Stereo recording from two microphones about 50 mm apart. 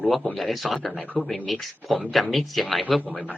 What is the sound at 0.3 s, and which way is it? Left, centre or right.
A woman's voice, centre.